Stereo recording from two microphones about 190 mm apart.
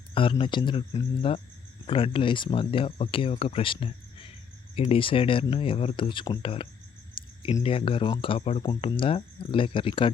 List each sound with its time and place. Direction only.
0.1 s speech: 25° left (ahead or behind)